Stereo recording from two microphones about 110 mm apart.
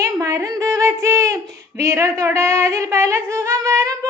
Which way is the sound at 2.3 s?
25° right (ahead or behind).